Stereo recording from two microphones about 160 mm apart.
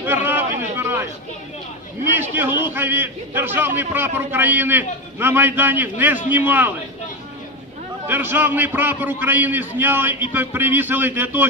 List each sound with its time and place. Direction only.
0.0 s a sound: 10° right (ahead or behind)
2.1 s a man's voice: 15° right (ahead or behind)
8.0 s a man's voice: 10° right (ahead or behind)